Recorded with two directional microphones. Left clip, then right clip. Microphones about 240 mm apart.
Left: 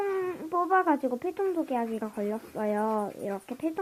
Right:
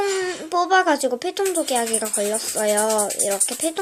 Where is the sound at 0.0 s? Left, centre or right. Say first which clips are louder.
Right 7 dB; centre.